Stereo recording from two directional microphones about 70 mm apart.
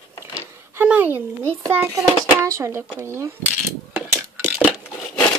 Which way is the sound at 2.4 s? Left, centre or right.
Right.